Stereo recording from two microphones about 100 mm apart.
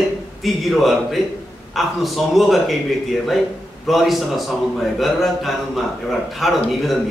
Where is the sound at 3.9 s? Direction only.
Centre (ahead or behind).